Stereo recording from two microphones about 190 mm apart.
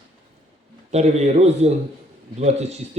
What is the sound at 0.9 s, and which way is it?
Speech, 35° right (ahead or behind).